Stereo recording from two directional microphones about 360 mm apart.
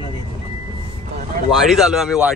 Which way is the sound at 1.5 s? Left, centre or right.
Centre.